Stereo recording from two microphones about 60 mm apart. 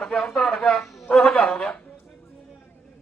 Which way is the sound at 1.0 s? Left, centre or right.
Centre.